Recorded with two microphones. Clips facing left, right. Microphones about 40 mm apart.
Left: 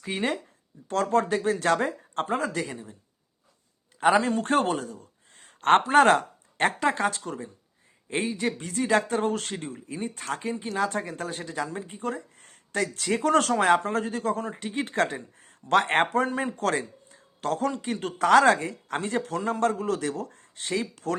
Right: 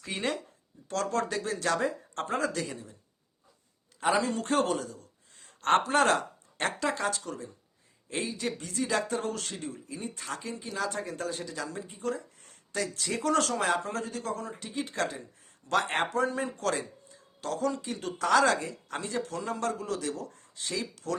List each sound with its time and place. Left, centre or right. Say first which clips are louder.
0.0 s speech: left 4 dB; centre
0.9 s speech: left 6 dB; left
2.2 s speech: left 2 dB; left
4.1 s a man's voice: left 4 dB; left